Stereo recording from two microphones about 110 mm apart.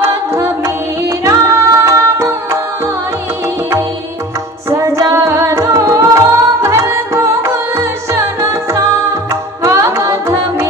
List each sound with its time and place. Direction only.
0.0 s music: 25° right (ahead or behind)
4.6 s music: 30° right (ahead or behind)